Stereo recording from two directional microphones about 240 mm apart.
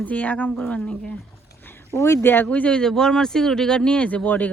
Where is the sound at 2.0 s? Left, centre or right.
Centre.